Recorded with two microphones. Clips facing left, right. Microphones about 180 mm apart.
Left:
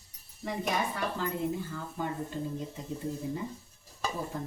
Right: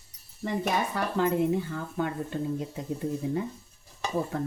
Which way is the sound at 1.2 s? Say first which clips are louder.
Right 11 dB; 65° right (ahead or behind).